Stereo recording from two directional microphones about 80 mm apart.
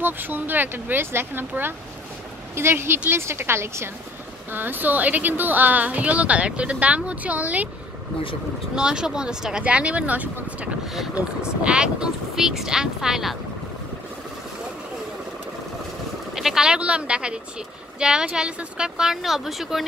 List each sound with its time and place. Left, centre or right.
0.0 s a woman's voice: right
8.7 s speech: centre
16.3 s speech: centre